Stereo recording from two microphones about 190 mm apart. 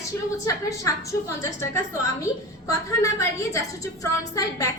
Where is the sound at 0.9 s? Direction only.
15° left (ahead or behind).